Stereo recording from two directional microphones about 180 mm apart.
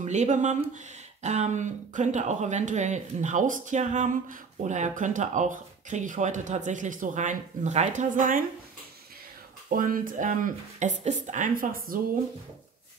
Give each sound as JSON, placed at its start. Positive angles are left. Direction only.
{"t": 0.0, "sound": "speech", "side_deg": -40}
{"t": 9.8, "sound": "speech", "side_deg": -50}